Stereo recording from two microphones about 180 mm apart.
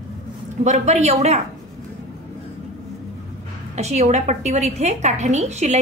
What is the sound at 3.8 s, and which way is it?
Speech, 40° right (ahead or behind).